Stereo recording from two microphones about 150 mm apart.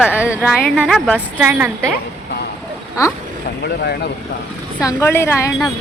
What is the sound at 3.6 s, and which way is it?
Speech, 90° left.